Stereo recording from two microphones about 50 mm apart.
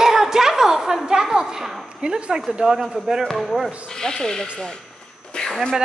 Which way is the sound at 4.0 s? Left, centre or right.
Centre.